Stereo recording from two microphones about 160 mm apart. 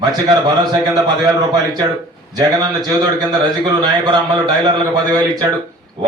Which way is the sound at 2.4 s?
25° right (ahead or behind).